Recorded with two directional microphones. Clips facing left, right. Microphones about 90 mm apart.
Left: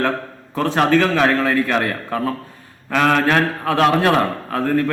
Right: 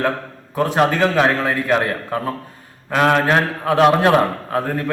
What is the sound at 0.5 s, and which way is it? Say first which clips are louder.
A man's voice: left 1 dB; 15° right (ahead or behind).